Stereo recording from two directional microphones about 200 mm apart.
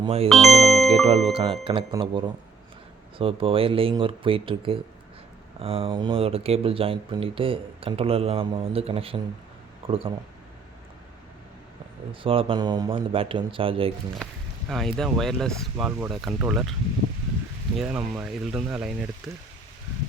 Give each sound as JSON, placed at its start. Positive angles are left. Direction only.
{"t": 0.0, "sound": "speech", "side_deg": -30}
{"t": 0.3, "sound": "speech", "side_deg": 0}
{"t": 1.3, "sound": "speech", "side_deg": -25}
{"t": 12.2, "sound": "speech", "side_deg": -25}
{"t": 14.7, "sound": "speech", "side_deg": 0}
{"t": 17.7, "sound": "speech", "side_deg": -5}